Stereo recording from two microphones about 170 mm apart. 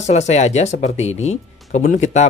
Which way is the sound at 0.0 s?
40° left (ahead or behind).